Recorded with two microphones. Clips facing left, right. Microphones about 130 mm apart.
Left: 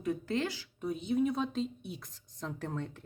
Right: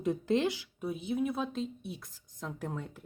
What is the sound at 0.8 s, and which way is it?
Speech, 5° right (ahead or behind).